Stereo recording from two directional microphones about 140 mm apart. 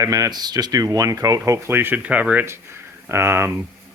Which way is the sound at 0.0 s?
25° right (ahead or behind).